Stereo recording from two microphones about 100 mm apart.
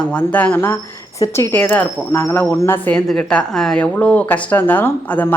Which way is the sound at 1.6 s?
15° left (ahead or behind).